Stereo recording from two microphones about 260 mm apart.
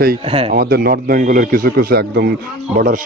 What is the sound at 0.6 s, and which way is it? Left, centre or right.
A man's voice, right.